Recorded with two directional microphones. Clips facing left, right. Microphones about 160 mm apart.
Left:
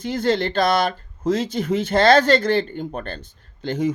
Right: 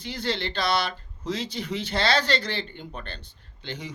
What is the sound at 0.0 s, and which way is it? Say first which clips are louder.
Speech: left 9 dB; 50° left (ahead or behind).